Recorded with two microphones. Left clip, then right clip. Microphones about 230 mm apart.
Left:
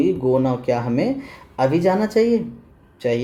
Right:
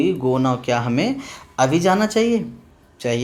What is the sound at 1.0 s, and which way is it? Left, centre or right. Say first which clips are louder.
Speech: even; centre.